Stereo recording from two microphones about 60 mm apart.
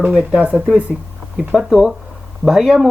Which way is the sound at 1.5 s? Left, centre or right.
Centre.